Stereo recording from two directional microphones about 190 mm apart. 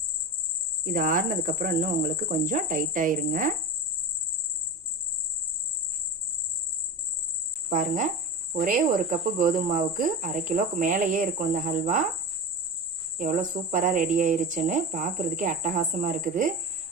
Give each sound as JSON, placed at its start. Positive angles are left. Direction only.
{"t": 0.9, "sound": "cricket", "side_deg": -45}
{"t": 7.7, "sound": "cricket", "side_deg": -45}
{"t": 13.1, "sound": "cricket", "side_deg": -40}